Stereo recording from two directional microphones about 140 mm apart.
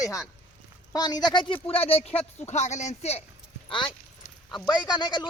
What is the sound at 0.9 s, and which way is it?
Speech, 30° left (ahead or behind).